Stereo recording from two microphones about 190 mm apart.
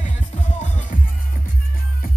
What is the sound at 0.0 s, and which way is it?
Music, 40° left (ahead or behind).